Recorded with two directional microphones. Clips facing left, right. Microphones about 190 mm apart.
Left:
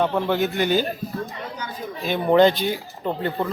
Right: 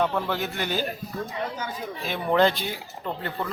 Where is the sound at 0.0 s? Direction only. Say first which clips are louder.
Left 3 dB; 15° left (ahead or behind).